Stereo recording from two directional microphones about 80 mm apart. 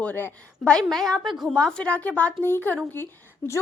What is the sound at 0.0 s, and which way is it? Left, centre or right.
Speech, left.